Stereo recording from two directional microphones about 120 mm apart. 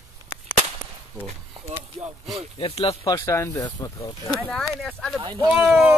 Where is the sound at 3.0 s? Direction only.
30° left (ahead or behind).